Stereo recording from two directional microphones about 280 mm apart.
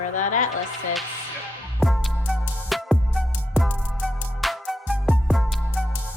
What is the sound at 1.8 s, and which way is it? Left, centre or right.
Music, centre.